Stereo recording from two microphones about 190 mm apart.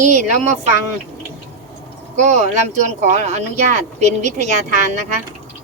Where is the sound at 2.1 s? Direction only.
40° right (ahead or behind).